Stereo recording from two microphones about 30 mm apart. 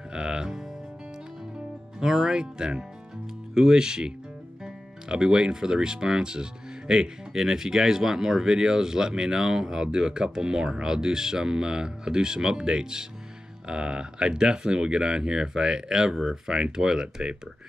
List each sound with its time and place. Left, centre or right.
0.1 s music: right
2.0 s speech: right